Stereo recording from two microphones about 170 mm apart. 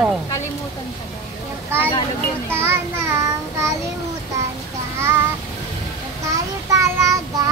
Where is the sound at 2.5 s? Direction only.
15° right (ahead or behind).